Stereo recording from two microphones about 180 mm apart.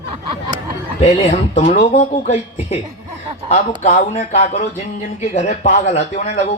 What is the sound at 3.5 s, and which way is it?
Speech, 40° left (ahead or behind).